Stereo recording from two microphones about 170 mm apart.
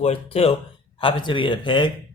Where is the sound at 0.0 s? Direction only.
35° left (ahead or behind).